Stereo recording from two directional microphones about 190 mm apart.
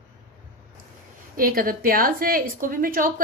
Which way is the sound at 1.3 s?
50° right (ahead or behind).